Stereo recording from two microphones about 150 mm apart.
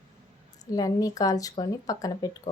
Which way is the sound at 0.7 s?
25° left (ahead or behind).